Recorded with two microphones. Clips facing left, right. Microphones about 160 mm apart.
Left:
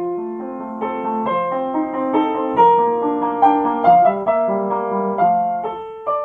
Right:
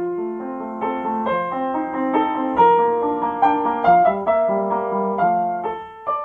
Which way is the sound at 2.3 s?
10° left (ahead or behind).